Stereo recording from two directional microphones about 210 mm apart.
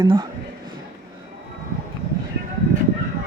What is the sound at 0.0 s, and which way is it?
Speech, 20° right (ahead or behind).